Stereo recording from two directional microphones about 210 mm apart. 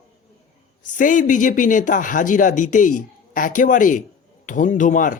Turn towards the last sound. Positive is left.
turn(degrees=40)  # may be behind; listen again after turning